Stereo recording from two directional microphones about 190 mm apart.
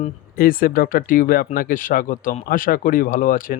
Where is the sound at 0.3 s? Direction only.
50° left (ahead or behind).